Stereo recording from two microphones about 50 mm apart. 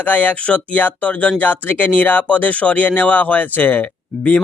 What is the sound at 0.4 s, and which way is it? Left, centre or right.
Speech, left.